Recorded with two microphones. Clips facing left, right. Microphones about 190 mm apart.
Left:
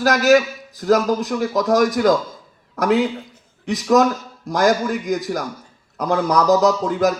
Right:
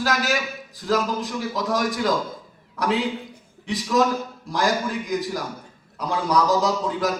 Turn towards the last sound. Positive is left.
turn(degrees=45)  # may be behind; listen again after turning